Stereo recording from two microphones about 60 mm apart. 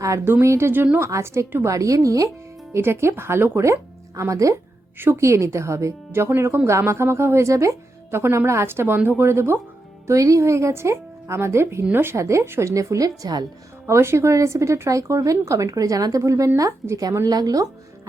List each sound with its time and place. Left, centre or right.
0.4 s speech: right
2.7 s speech: right
3.6 s speech: right
4.9 s a woman's voice: right
5.2 s speech: right
10.1 s speech: right
12.7 s speech: right
13.8 s speech: right
17.2 s a woman's voice: right